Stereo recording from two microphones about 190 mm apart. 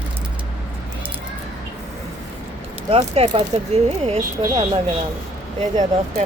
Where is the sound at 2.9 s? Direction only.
35° right (ahead or behind).